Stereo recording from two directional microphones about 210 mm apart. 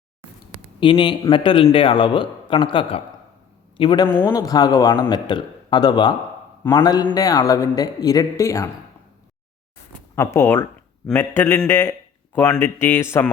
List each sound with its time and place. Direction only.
0.8 s a man's voice: 25° left (ahead or behind)
10.2 s a man's voice: 10° left (ahead or behind)